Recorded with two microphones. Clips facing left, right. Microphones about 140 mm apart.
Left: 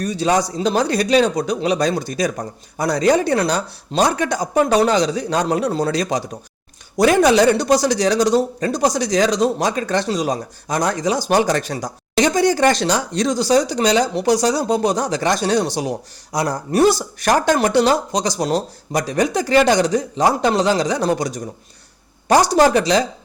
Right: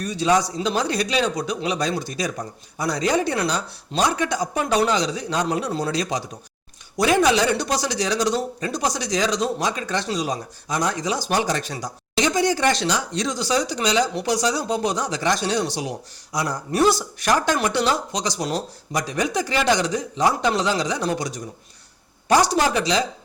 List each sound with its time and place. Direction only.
0.0 s speech: 40° left (ahead or behind)